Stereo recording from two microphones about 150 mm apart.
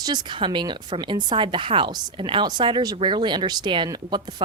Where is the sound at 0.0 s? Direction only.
30° right (ahead or behind).